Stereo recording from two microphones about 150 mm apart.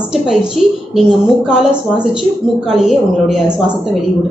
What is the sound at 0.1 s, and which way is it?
A woman's voice, 5° right (ahead or behind).